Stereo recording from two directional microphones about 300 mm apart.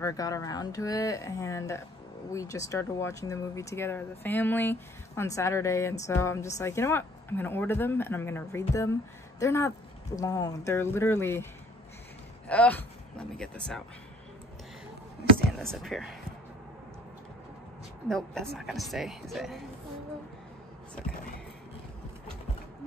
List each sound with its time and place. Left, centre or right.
0.0 s speech: centre
12.4 s a man's voice: centre
15.6 s speech: centre
18.0 s speech: centre